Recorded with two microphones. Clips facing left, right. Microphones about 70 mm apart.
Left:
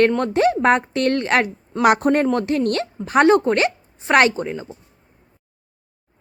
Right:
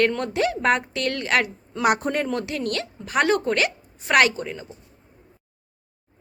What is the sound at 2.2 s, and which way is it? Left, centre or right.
A woman's voice, left.